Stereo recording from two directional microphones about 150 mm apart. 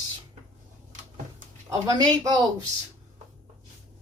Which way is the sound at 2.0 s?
25° right (ahead or behind).